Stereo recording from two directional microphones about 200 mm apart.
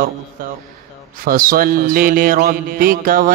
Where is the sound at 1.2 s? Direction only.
45° right (ahead or behind).